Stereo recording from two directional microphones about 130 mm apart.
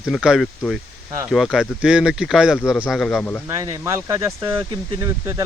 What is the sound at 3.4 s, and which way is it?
Speech, 25° right (ahead or behind).